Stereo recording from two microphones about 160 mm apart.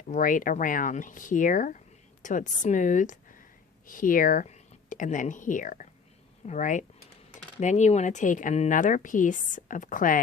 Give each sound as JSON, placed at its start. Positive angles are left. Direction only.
{"t": 0.1, "sound": "a woman's voice", "side_deg": 55}